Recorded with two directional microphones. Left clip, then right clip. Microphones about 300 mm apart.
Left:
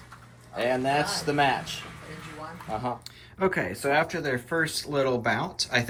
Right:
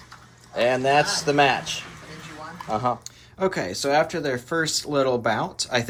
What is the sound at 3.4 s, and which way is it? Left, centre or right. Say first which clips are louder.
Speech: right 2 dB; centre.